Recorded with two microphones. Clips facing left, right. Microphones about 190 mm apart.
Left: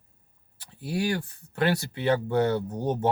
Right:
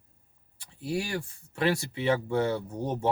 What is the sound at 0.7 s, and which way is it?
Speech, 65° left (ahead or behind).